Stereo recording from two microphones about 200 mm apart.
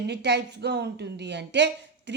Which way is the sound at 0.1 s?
60° right (ahead or behind).